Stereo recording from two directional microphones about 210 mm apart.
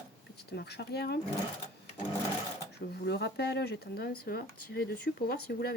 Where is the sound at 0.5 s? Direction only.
50° left (ahead or behind).